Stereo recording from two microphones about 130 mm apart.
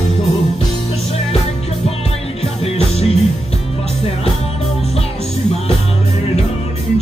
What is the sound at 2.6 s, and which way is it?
Music, 50° left (ahead or behind).